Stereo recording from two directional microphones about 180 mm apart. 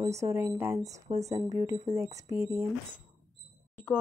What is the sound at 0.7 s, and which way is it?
Speech, 35° right (ahead or behind).